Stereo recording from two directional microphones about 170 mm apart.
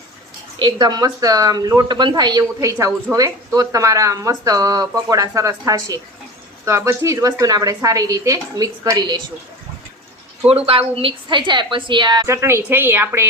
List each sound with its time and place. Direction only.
0.6 s speech: 25° right (ahead or behind)
10.5 s speech: 35° right (ahead or behind); by 13.2 s 10° right (ahead or behind)